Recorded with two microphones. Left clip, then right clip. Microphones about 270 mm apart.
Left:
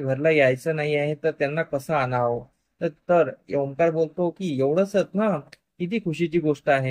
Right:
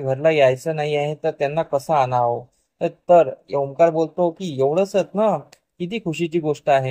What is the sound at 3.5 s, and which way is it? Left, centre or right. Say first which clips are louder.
Speech: right 7 dB; right.